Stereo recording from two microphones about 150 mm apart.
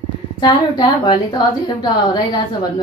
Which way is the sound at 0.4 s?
30° left (ahead or behind).